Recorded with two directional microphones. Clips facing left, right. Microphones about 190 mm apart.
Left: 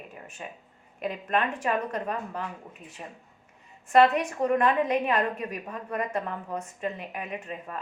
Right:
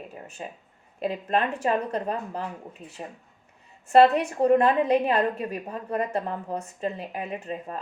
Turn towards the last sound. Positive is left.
turn(degrees=-35)  # may be behind; listen again after turning